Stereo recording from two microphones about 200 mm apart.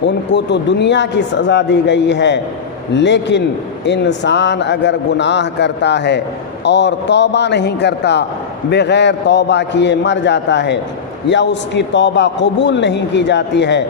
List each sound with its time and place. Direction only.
0.3 s a man's voice: 60° left (ahead or behind)